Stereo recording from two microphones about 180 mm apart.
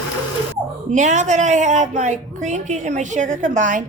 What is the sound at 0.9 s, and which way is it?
Speech, 45° right (ahead or behind).